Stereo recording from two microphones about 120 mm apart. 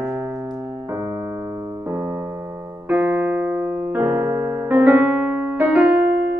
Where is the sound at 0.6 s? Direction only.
20° right (ahead or behind).